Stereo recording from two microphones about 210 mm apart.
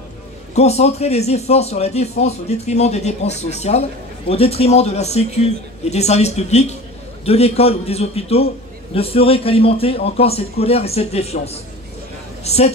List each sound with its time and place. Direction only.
0.6 s a man's voice: 30° left (ahead or behind)